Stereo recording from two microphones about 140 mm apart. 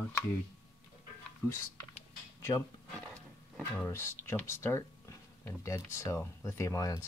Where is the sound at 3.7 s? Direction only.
15° left (ahead or behind).